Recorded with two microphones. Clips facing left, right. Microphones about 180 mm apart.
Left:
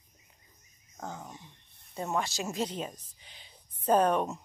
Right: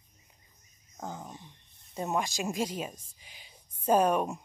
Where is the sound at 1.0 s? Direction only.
15° right (ahead or behind).